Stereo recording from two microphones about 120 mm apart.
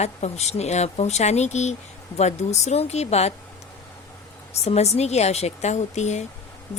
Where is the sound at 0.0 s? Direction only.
65° left (ahead or behind).